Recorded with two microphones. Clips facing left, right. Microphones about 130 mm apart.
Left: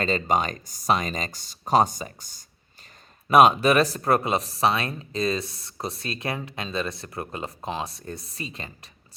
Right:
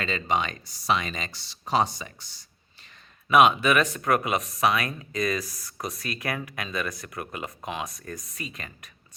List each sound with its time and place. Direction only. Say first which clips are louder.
0.0 s speech: left 3 dB; 40° left (ahead or behind)